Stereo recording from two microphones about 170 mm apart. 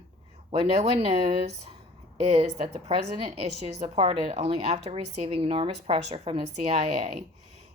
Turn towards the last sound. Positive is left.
turn(degrees=-40)  # may be behind; listen again after turning